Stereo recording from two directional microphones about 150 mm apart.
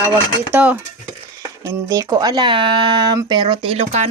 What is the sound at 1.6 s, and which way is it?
Speech, 25° right (ahead or behind).